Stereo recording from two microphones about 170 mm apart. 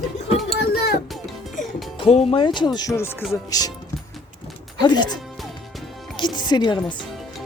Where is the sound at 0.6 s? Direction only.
70° left (ahead or behind).